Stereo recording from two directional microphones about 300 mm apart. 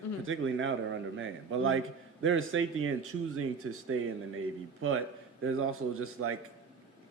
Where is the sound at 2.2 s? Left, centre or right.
Right.